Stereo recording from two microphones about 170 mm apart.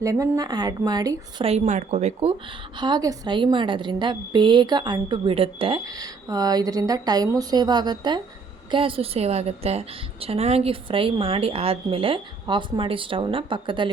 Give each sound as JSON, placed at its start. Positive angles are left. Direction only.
{"t": 0.0, "sound": "a woman's voice", "side_deg": -20}
{"t": 1.5, "sound": "a woman's voice", "side_deg": -40}
{"t": 2.7, "sound": "a woman's voice", "side_deg": -25}
{"t": 5.8, "sound": "a woman's voice", "side_deg": -20}